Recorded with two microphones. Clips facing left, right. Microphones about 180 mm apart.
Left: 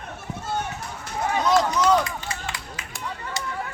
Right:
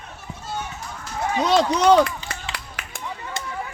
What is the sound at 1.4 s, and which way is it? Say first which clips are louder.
Speech: right 2 dB; 75° right (ahead or behind).